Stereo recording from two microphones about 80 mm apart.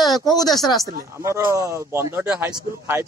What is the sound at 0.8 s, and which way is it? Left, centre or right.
Speech, right.